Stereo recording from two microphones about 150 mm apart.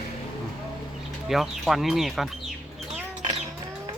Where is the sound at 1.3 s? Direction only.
Centre (ahead or behind).